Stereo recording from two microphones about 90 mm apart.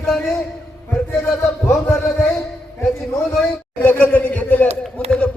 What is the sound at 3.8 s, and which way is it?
Speech, 20° left (ahead or behind).